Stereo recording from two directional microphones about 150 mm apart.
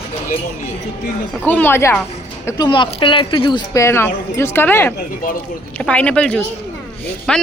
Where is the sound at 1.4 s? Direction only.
10° left (ahead or behind).